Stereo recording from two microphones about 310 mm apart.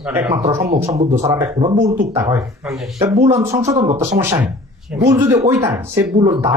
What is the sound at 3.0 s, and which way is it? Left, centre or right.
Speech, centre.